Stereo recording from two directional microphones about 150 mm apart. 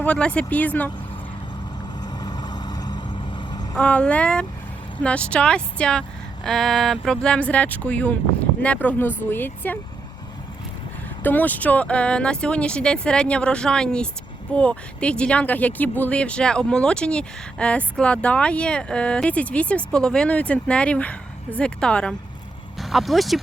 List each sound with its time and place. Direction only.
0.0 s speech: 10° left (ahead or behind)
2.0 s vehicle: 25° left (ahead or behind)
3.8 s speech: 5° left (ahead or behind)
11.2 s speech: 10° left (ahead or behind)